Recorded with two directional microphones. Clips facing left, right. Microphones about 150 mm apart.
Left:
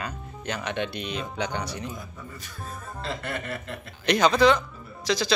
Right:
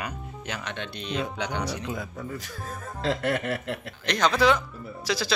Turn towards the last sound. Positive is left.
turn(degrees=-5)  # may be behind; listen again after turning